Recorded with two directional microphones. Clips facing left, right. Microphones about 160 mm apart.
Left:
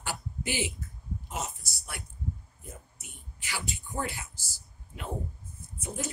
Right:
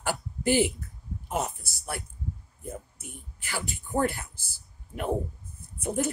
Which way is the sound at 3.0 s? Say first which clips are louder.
Right 6 dB; 50° right (ahead or behind).